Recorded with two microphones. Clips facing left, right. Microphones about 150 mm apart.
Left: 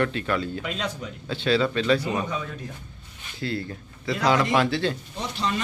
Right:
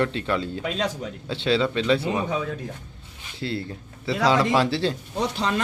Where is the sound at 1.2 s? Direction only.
25° right (ahead or behind).